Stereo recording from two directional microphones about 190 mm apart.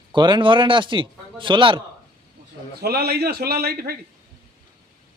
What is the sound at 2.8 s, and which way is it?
A man's voice, 55° right (ahead or behind).